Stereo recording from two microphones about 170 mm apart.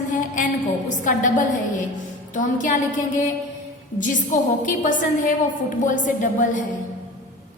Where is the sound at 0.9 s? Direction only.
50° left (ahead or behind).